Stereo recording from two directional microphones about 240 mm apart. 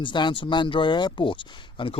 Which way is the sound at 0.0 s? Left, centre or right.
Centre.